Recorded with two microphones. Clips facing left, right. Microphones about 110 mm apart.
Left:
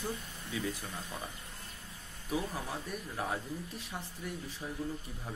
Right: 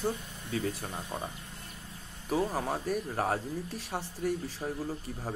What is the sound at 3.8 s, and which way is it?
Speech, 80° right.